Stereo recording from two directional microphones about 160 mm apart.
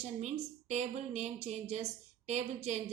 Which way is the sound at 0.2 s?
45° right (ahead or behind).